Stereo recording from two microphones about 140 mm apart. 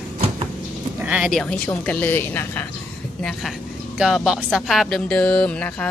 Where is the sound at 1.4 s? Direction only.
10° left (ahead or behind).